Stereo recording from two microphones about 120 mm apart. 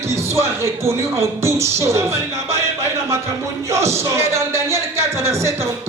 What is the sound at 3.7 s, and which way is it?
Speech, 25° right (ahead or behind).